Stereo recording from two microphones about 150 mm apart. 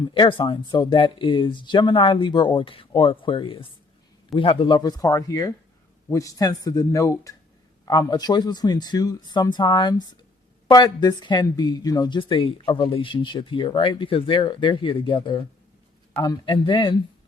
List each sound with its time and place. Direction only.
0.1 s speech: 35° left (ahead or behind)